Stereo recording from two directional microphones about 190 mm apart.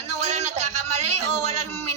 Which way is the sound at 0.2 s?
35° right (ahead or behind).